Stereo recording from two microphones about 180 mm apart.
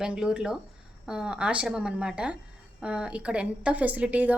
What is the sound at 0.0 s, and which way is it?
A woman's voice, 5° right (ahead or behind).